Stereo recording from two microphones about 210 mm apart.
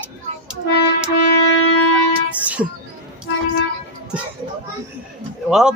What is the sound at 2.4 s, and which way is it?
Music, 5° right (ahead or behind).